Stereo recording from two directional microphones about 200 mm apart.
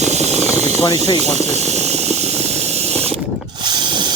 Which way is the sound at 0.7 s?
15° left (ahead or behind).